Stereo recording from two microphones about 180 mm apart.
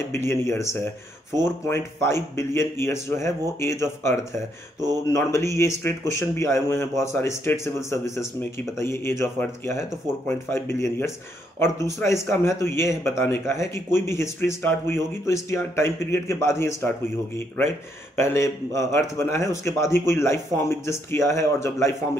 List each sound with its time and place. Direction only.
0.1 s a man's voice: 15° left (ahead or behind)
18.1 s a man's voice: 15° left (ahead or behind)